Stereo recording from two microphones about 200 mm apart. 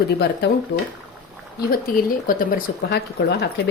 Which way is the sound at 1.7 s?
45° left (ahead or behind).